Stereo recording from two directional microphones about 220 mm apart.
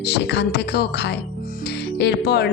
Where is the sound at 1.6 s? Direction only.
50° left (ahead or behind).